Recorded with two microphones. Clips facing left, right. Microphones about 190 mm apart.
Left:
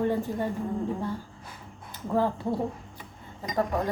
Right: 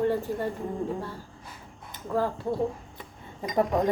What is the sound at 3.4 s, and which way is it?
Speech, 20° right (ahead or behind).